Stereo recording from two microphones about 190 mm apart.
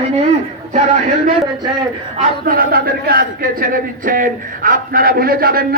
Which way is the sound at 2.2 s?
50° right (ahead or behind).